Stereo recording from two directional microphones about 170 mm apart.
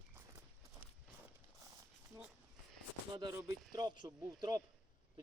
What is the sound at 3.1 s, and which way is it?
Speech, 25° right (ahead or behind).